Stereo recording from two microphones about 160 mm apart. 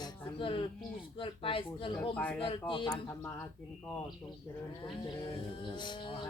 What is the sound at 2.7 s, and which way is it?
Speech, 30° left (ahead or behind).